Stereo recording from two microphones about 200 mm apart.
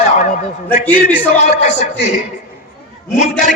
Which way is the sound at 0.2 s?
40° left (ahead or behind).